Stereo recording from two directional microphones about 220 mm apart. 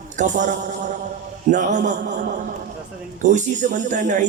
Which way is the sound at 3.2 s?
35° right (ahead or behind).